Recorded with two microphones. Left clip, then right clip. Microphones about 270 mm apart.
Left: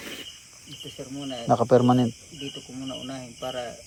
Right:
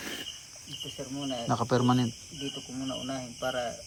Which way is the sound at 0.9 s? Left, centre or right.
Centre.